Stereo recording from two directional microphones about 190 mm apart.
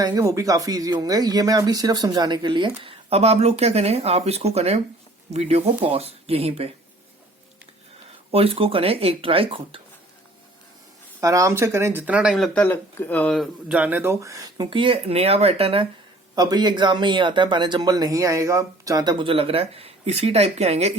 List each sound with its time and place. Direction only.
0.0 s speech: 20° right (ahead or behind)
8.3 s speech: 30° right (ahead or behind)
11.2 s speech: 15° right (ahead or behind); by 20.9 s 35° right (ahead or behind)